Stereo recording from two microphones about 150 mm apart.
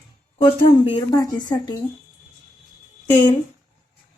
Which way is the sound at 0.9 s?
30° left (ahead or behind).